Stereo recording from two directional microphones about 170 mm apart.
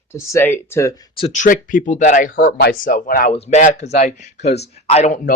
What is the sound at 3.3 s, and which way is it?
Speech, 40° left (ahead or behind).